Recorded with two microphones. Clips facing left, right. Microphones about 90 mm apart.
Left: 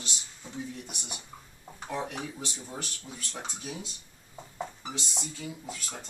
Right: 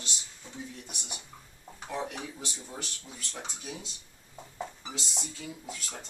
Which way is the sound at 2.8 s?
5° left (ahead or behind).